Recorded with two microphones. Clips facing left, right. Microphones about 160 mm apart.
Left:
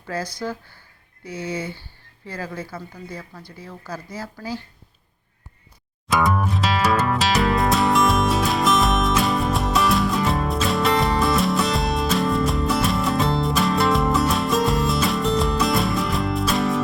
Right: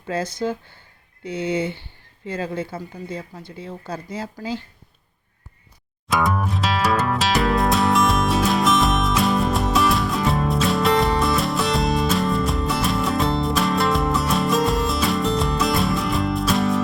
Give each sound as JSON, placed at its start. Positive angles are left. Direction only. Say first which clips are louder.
{"t": 0.1, "sound": "speech", "louder": "right 4 dB", "side_deg": -25}
{"t": 6.1, "sound": "music", "louder": "left 1 dB", "side_deg": 0}